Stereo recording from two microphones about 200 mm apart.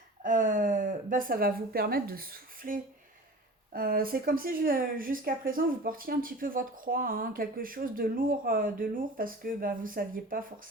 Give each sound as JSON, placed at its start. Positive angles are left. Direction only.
{"t": 0.2, "sound": "a woman's voice", "side_deg": -40}